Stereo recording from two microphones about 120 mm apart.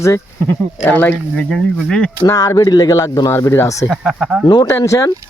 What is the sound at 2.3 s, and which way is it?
Speech, 30° left (ahead or behind).